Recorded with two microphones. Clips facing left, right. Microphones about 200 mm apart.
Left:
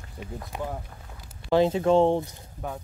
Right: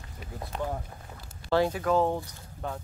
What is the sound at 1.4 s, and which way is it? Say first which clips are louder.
Speech: left 5 dB; 20° left (ahead or behind).